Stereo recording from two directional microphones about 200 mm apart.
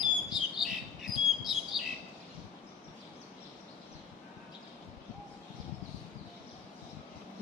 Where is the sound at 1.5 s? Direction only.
Centre (ahead or behind).